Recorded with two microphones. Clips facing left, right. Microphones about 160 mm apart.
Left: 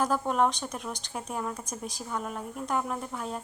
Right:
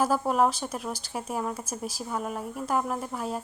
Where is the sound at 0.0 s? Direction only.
5° right (ahead or behind).